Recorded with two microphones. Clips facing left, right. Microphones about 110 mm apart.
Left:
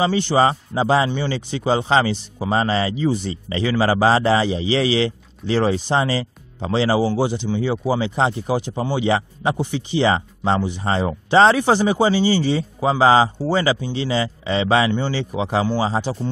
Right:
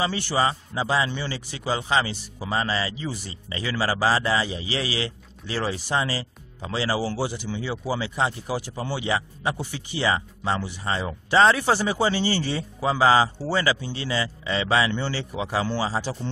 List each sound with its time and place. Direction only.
0.0 s a man's voice: 20° left (ahead or behind)